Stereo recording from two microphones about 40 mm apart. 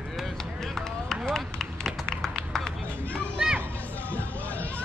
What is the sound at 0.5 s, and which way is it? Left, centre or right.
Run, centre.